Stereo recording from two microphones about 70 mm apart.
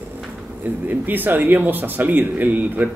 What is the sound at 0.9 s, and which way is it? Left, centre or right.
Speech, right.